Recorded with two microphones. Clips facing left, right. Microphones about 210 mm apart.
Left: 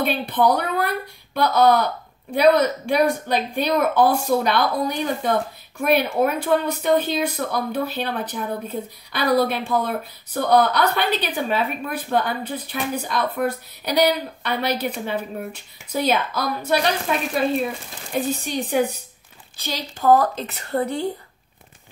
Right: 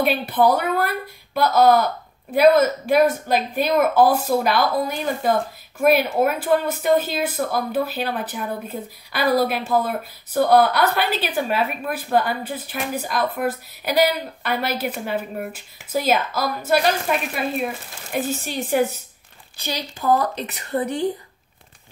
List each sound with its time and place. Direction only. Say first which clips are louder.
0.0 s a woman's voice: right 2 dB; 10° right (ahead or behind)
18.3 s speech: right 1 dB; 5° right (ahead or behind)